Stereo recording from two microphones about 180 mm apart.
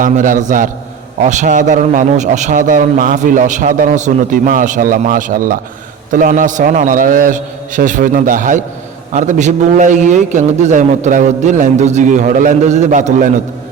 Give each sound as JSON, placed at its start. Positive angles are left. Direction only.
{"t": 0.0, "sound": "a man's voice", "side_deg": -45}